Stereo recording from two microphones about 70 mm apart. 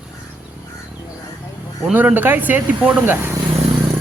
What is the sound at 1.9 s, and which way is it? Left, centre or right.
Speech, right.